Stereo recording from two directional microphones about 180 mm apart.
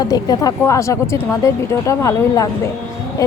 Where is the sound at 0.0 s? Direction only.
20° left (ahead or behind).